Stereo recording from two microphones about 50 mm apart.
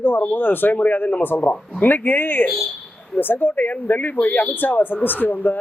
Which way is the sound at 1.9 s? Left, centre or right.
Left.